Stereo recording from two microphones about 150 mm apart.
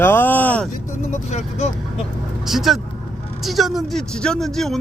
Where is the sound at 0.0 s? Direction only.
15° left (ahead or behind).